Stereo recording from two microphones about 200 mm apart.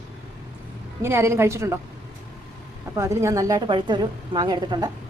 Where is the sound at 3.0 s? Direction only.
15° right (ahead or behind).